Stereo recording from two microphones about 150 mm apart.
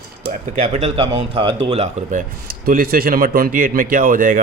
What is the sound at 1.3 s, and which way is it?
Speech, 35° right (ahead or behind).